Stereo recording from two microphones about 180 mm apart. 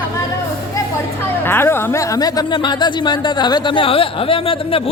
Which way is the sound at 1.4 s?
10° left (ahead or behind).